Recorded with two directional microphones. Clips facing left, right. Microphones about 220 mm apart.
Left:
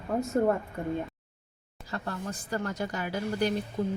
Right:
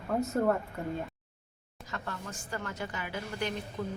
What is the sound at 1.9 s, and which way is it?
A woman's voice, 35° left (ahead or behind).